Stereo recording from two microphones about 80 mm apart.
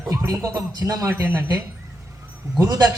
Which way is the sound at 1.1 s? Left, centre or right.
Right.